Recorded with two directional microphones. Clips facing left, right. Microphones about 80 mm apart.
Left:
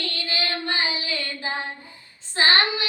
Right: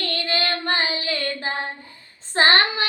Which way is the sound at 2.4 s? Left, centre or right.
Right.